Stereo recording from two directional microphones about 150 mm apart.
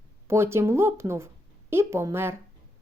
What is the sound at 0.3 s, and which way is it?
A woman's voice, 15° right (ahead or behind).